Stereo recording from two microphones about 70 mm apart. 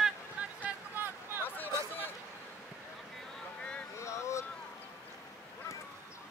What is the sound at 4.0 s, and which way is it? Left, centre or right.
Vehicle, left.